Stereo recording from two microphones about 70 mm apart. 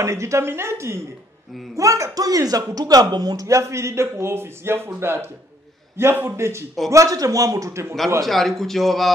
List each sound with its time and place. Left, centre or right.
0.0 s a man's voice: right
1.8 s a man's voice: right
3.4 s a man's voice: right
6.9 s a man's voice: right
8.2 s speech: centre